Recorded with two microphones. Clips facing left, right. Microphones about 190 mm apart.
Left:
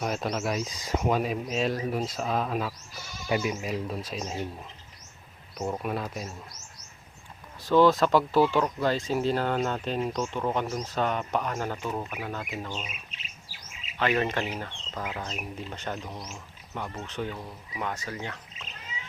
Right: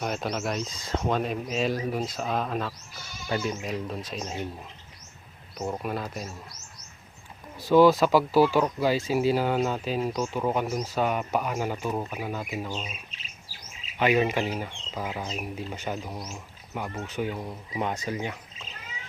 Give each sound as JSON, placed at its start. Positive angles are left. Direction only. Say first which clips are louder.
{"t": 0.0, "sound": "speech", "louder": "even", "side_deg": 0}
{"t": 5.5, "sound": "speech", "louder": "even", "side_deg": 0}
{"t": 7.6, "sound": "speech", "louder": "right 2 dB", "side_deg": -10}
{"t": 14.0, "sound": "speech", "louder": "right 3 dB", "side_deg": -10}